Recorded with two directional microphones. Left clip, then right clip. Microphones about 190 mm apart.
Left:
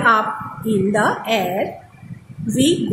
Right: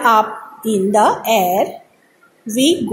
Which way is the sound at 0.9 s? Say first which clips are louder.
Right 7 dB; 20° right (ahead or behind).